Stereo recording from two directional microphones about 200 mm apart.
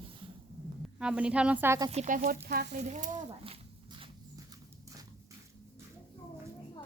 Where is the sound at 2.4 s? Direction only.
55° right (ahead or behind).